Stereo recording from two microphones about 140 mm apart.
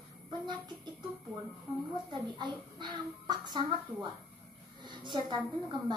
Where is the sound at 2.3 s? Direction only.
35° right (ahead or behind).